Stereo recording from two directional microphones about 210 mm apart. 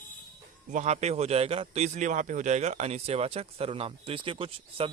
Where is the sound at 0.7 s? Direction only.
35° right (ahead or behind).